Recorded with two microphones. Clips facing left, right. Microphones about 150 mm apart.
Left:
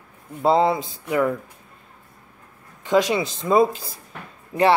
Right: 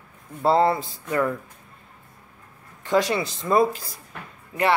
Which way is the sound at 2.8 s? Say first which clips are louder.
Left 2 dB; 20° left (ahead or behind).